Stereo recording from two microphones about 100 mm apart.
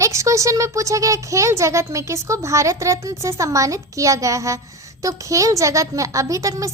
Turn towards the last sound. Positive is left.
turn(degrees=-35)  # may be behind; listen again after turning